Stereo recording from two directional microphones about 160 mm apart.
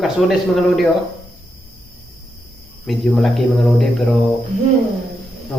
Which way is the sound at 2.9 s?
Centre (ahead or behind).